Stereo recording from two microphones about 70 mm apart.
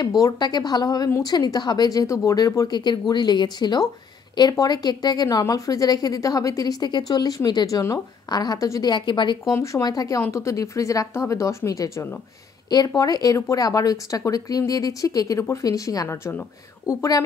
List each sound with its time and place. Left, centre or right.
0.4 s speech: left
2.0 s a woman's voice: left
2.7 s speech: left
4.6 s speech: left
5.4 s a woman's voice: left
8.8 s speech: left
9.4 s speech: left
9.8 s a woman's voice: left
10.3 s speech: left
12.6 s a woman's voice: left
16.1 s speech: left